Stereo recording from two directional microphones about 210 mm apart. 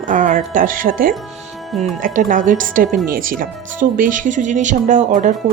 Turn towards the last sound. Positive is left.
turn(degrees=-35)  # may be behind; listen again after turning